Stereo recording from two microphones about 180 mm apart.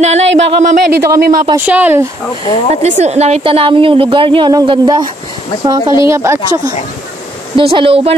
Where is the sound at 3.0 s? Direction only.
35° right (ahead or behind).